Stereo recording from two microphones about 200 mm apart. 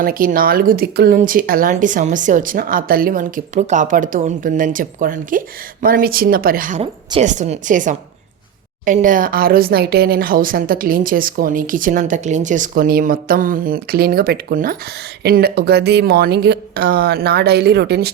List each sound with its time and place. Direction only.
0.0 s a woman's voice: 45° right (ahead or behind)